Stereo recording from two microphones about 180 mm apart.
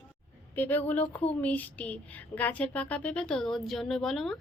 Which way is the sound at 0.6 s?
10° left (ahead or behind).